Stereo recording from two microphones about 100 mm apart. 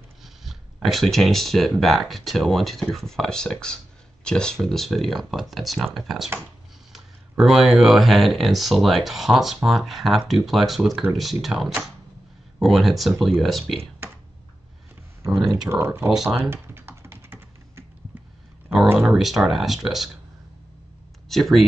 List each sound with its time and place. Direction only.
0.2 s a sound: centre (ahead or behind)
0.8 s speech: centre (ahead or behind)
15.7 s speech: 25° right (ahead or behind)
16.1 s speech: 5° right (ahead or behind)
16.6 s computer keyboard: 25° right (ahead or behind)
18.9 s speech: 5° right (ahead or behind)
21.3 s speech: centre (ahead or behind)